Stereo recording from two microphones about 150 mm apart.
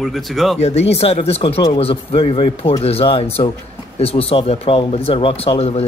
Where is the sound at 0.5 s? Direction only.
45° left (ahead or behind).